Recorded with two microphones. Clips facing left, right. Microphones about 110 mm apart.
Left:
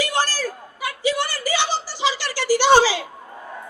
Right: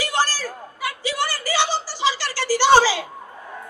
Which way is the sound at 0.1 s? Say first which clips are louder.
Even; 15° left (ahead or behind).